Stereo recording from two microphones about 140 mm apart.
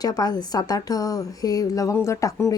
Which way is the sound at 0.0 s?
25° left (ahead or behind).